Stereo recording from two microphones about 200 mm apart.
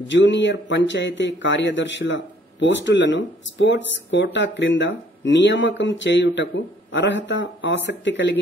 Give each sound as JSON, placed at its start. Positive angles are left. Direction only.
{"t": 0.0, "sound": "a man's voice", "side_deg": 65}